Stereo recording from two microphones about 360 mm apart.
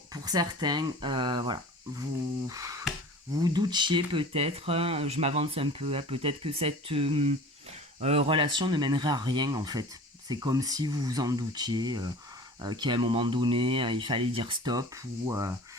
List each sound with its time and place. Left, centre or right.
0.1 s speech: centre